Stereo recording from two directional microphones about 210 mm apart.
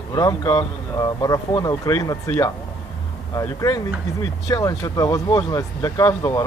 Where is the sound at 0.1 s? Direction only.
15° left (ahead or behind).